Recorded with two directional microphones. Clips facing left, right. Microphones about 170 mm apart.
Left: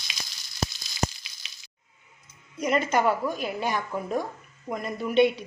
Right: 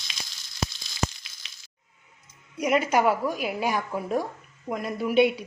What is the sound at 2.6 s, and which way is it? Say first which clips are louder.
A woman's voice: right 1 dB; 10° right (ahead or behind).